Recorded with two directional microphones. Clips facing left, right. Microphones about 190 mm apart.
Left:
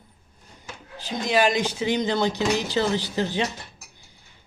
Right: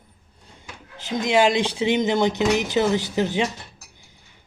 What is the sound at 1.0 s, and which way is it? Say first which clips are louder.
Speech: right 3 dB; 20° right (ahead or behind).